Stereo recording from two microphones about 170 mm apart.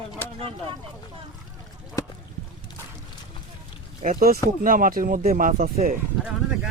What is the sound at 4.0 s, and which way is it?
Speech, 50° right (ahead or behind).